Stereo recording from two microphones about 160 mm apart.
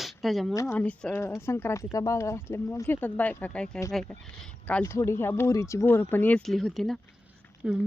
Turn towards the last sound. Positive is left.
turn(degrees=-5)  # may be behind; listen again after turning